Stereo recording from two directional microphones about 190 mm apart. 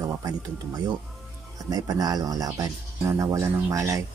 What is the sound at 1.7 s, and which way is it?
Speech, 20° right (ahead or behind).